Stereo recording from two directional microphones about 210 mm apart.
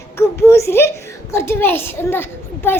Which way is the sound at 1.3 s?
10° left (ahead or behind).